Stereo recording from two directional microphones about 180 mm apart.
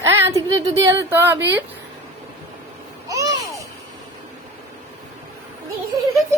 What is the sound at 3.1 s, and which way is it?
Babbling, 20° right (ahead or behind).